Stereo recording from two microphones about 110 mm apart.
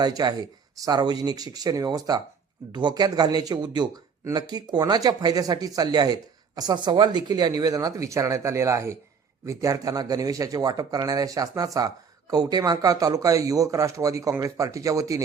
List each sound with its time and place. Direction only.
0.0 s speech: 40° right (ahead or behind)